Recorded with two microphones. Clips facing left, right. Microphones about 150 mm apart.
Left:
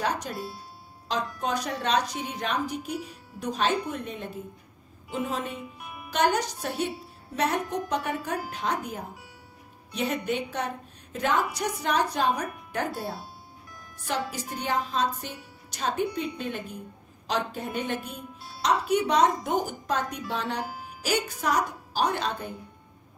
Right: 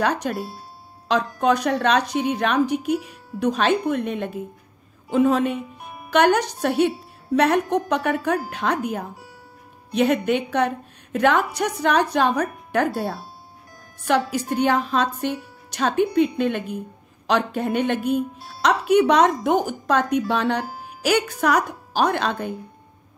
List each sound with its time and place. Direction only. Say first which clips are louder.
0.0 s speech: right 7 dB; 75° right (ahead or behind)
5.8 s music: right 3 dB; 35° right (ahead or behind)
6.0 s speech: right 7 dB; 70° right (ahead or behind)
14.0 s speech: right 10 dB; 70° right (ahead or behind)